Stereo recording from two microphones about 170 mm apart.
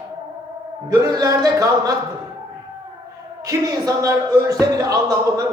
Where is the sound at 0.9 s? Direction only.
20° right (ahead or behind).